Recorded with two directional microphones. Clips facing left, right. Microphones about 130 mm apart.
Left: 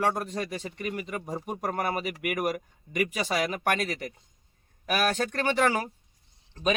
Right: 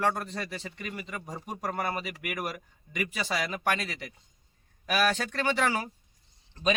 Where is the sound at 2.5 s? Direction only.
50° left (ahead or behind).